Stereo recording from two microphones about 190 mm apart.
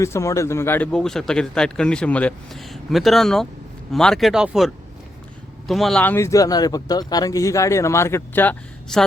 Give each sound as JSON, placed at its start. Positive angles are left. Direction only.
{"t": 0.0, "sound": "speech", "side_deg": 15}